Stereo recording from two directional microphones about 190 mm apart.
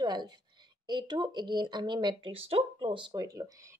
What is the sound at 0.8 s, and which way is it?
Speech, 25° right (ahead or behind).